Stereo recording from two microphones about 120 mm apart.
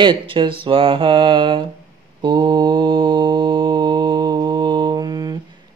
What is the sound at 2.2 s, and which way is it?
Mantra, 40° right (ahead or behind).